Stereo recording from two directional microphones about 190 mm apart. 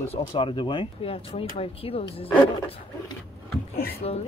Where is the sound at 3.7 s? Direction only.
55° left (ahead or behind).